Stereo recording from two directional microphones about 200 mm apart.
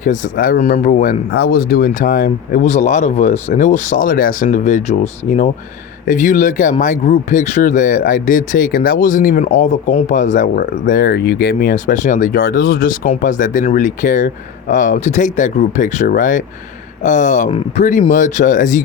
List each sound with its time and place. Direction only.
0.0 s speech: 45° left (ahead or behind)
1.3 s speech: 55° left (ahead or behind); by 4.9 s 35° left (ahead or behind)
6.1 s speech: 40° left (ahead or behind)